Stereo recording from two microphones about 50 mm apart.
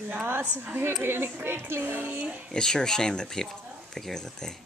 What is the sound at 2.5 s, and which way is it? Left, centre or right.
Speech, centre.